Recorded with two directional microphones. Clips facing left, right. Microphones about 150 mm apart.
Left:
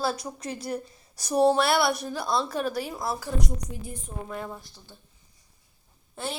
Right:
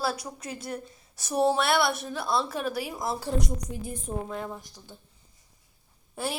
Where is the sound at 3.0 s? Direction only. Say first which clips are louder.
Even; 25° right (ahead or behind).